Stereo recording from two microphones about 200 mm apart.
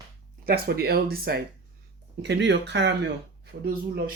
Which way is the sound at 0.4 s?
50° right (ahead or behind).